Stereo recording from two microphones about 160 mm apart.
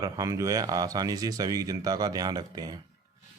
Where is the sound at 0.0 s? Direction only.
20° right (ahead or behind).